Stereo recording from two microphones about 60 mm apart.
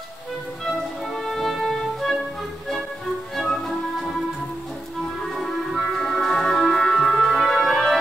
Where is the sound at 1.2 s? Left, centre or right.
Centre.